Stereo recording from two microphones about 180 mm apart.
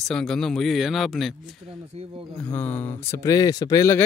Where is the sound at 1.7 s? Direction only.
30° right (ahead or behind).